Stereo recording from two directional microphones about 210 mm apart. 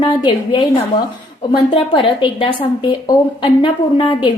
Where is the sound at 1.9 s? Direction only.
25° left (ahead or behind).